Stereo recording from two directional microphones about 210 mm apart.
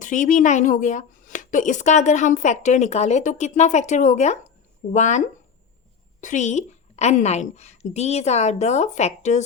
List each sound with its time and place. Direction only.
0.0 s speech: 35° left (ahead or behind)